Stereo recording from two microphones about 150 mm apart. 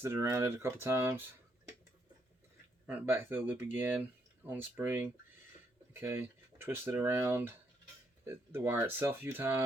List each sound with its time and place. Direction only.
0.0 s speech: 15° right (ahead or behind)
2.8 s speech: 15° right (ahead or behind)